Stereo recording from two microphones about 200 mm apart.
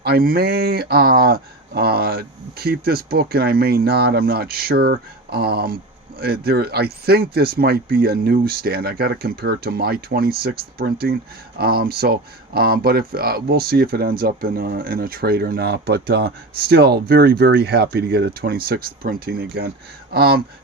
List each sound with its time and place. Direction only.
0.0 s speech: 50° right (ahead or behind)